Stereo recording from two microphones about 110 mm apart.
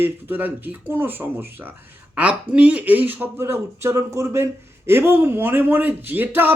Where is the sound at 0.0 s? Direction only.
20° right (ahead or behind).